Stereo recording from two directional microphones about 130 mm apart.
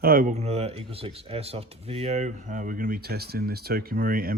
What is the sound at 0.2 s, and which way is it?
Speech, 65° right (ahead or behind).